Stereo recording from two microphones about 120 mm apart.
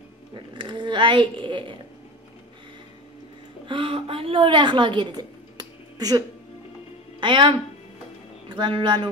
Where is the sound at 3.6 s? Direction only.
45° right (ahead or behind).